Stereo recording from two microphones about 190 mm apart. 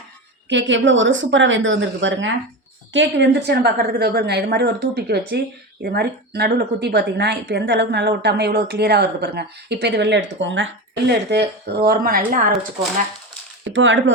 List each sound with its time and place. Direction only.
0.4 s a woman's voice: 70° right (ahead or behind); by 12.5 s 50° right (ahead or behind)
13.7 s speech: 75° right (ahead or behind)